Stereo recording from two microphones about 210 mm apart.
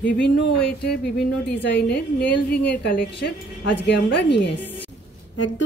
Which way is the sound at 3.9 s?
50° left (ahead or behind).